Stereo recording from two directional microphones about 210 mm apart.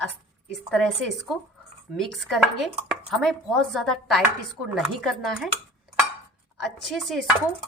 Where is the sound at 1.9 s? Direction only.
Centre (ahead or behind).